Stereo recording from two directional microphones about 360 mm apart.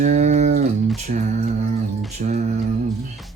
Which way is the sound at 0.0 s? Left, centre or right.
Centre.